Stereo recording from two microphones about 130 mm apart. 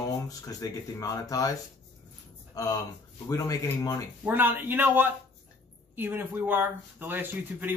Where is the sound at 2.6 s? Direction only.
25° left (ahead or behind).